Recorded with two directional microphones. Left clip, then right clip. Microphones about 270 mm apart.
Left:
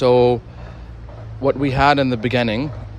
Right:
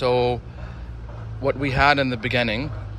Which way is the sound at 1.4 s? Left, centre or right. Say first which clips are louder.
Left 3 dB; centre.